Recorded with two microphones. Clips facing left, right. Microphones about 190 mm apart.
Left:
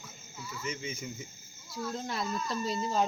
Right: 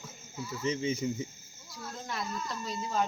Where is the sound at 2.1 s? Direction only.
30° left (ahead or behind).